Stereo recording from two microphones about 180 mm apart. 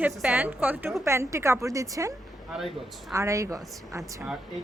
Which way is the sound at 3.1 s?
15° right (ahead or behind).